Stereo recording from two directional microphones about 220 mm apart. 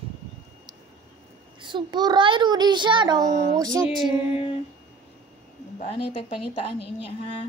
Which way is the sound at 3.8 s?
10° right (ahead or behind).